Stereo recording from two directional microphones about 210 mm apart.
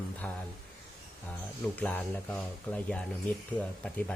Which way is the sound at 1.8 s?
10° left (ahead or behind).